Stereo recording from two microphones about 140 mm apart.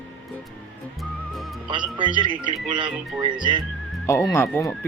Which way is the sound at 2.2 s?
35° right (ahead or behind).